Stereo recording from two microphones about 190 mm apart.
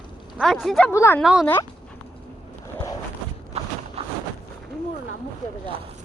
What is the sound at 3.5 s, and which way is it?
Walk, 30° right (ahead or behind).